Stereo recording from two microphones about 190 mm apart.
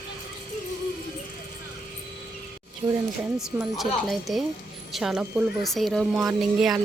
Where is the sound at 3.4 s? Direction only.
Centre (ahead or behind).